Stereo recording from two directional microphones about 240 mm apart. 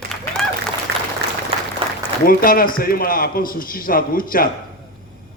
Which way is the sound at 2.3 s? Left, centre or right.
Left.